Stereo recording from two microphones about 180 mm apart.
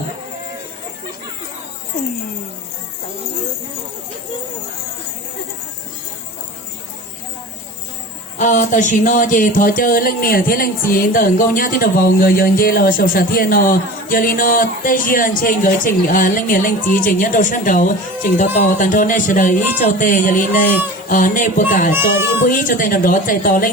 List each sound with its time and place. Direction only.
8.4 s speech: 45° left (ahead or behind)